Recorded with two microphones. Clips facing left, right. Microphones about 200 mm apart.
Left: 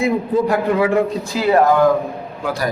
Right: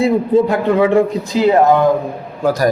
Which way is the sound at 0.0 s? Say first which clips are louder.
Right 4 dB; 25° right (ahead or behind).